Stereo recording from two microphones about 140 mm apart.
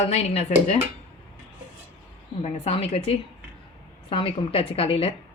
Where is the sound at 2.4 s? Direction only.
50° left (ahead or behind).